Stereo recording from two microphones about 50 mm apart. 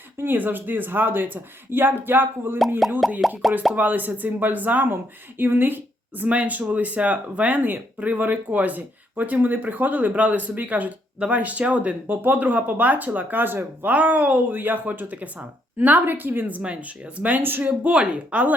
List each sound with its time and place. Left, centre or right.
0.3 s speech: right
3.0 s plop: centre
3.8 s speech: right
5.4 s speech: right
17.4 s speech: right
17.7 s speech: right